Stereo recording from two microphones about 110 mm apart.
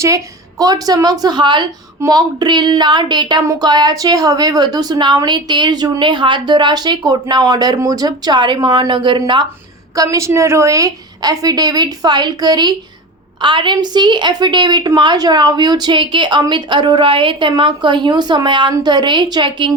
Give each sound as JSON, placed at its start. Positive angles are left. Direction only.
{"t": 0.6, "sound": "speech", "side_deg": -35}
{"t": 9.9, "sound": "a woman's voice", "side_deg": -30}